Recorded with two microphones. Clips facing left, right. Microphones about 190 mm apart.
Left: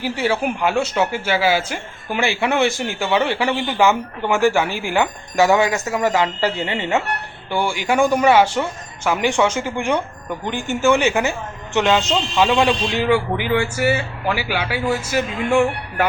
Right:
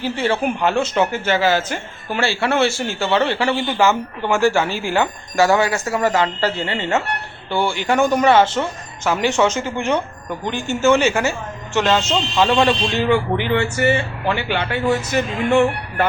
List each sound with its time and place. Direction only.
0.0 s speech: 10° left (ahead or behind)